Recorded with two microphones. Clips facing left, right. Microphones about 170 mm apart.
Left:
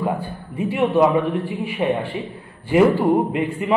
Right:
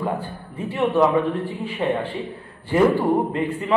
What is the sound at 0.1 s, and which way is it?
A man's voice, 10° left (ahead or behind).